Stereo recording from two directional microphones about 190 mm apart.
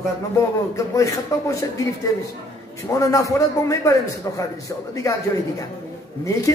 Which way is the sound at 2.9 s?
15° left (ahead or behind).